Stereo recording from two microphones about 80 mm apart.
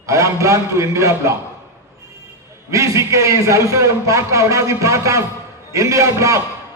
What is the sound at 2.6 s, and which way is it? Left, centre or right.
A man's voice, right.